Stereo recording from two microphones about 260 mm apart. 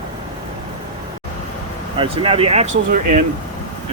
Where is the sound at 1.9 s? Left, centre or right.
Right.